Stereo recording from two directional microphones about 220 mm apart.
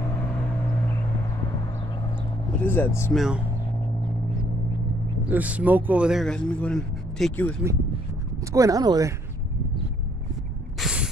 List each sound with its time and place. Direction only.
2.6 s speech: 10° left (ahead or behind)
3.2 s speech: 5° right (ahead or behind)
5.3 s speech: 5° right (ahead or behind)
8.5 s speech: 15° right (ahead or behind)
10.8 s snort: 5° right (ahead or behind)